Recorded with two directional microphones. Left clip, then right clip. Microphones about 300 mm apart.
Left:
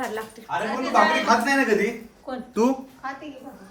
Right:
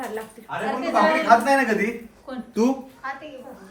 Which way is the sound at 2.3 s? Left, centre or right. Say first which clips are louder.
Left 2 dB; left.